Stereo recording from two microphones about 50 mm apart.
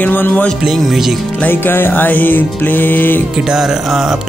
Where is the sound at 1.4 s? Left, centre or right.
Left.